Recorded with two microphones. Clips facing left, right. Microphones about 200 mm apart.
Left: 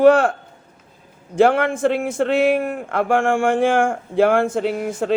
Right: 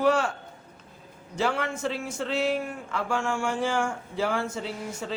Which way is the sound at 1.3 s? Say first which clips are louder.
Left 12 dB; 60° left (ahead or behind).